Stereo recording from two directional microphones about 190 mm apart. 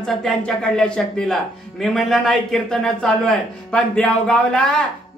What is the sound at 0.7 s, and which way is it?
Speech, 5° left (ahead or behind).